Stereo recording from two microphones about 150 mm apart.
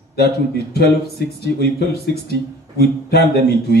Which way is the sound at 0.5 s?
90° left.